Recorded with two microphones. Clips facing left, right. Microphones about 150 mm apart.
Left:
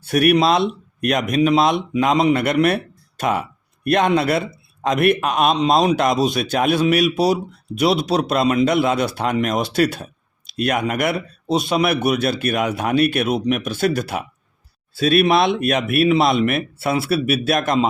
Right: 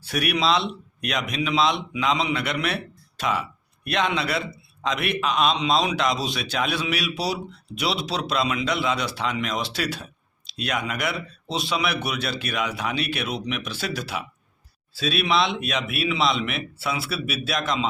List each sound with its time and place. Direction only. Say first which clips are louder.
0.0 s a man's voice: left 9 dB; 50° left (ahead or behind)